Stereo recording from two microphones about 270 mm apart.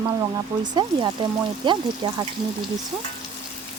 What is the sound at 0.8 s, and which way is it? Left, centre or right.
Speech, centre.